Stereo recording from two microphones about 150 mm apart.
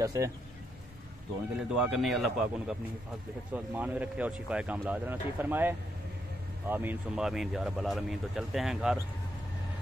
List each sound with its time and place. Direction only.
0.0 s speech: 20° right (ahead or behind)
1.8 s speech: 5° right (ahead or behind)